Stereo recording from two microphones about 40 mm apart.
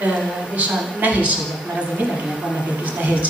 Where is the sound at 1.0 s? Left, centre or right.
Right.